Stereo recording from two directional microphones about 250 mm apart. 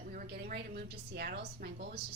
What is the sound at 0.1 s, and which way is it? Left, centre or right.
A woman's voice, right.